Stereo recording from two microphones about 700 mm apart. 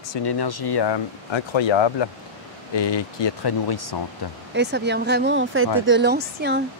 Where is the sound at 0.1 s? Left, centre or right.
Left.